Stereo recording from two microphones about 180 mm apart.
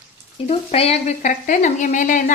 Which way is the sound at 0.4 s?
35° left (ahead or behind).